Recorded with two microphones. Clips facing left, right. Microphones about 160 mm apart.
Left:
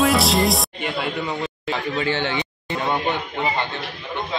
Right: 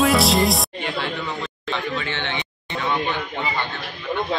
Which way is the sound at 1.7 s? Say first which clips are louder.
Left 3 dB; 40° left (ahead or behind).